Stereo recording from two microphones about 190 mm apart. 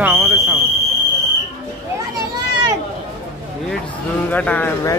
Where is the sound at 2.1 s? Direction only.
20° right (ahead or behind).